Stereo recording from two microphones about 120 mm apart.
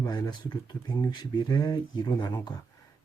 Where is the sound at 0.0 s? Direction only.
35° left (ahead or behind).